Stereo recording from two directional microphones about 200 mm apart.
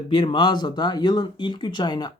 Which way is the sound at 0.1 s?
25° left (ahead or behind).